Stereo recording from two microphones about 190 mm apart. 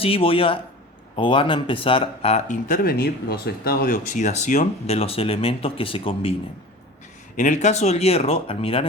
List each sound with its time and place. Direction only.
0.0 s speech: 30° left (ahead or behind)
7.3 s speech: 40° left (ahead or behind)